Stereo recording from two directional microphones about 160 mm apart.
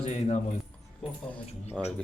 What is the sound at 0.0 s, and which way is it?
Speech, 45° left (ahead or behind).